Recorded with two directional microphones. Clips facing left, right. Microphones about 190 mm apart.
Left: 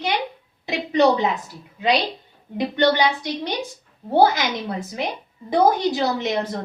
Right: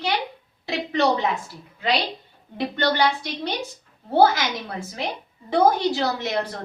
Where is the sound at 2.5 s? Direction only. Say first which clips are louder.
Left 4 dB; 15° left (ahead or behind).